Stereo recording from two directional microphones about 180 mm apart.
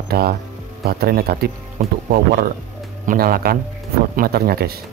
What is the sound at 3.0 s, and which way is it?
Speech, 50° right (ahead or behind).